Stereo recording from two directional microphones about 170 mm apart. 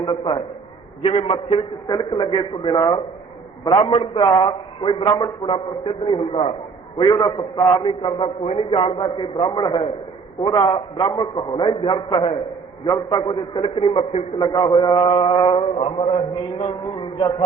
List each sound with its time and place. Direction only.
0.0 s mantra: 30° left (ahead or behind)
1.0 s a man's voice: 35° left (ahead or behind)
1.9 s mantra: 25° left (ahead or behind)
7.9 s mantra: 35° left (ahead or behind)
14.3 s mantra: 25° left (ahead or behind)